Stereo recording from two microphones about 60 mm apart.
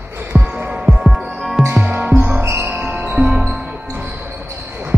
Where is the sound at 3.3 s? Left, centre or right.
Centre.